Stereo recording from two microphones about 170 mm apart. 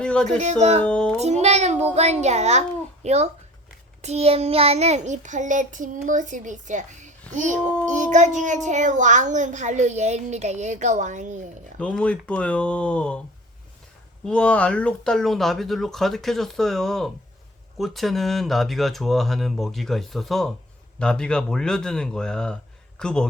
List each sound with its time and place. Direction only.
0.0 s a sound: 5° left (ahead or behind)
0.3 s speech: 45° right (ahead or behind)
0.8 s speech: 5° left (ahead or behind)
1.2 s a child's voice: 40° right (ahead or behind)
11.8 s speech: 5° left (ahead or behind)
14.3 s speech: 5° left (ahead or behind)